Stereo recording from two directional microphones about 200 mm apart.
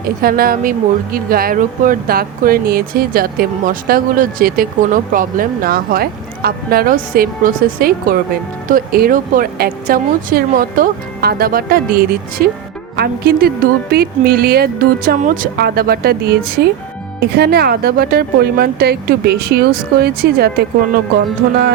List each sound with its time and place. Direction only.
0.2 s speech: 45° right (ahead or behind)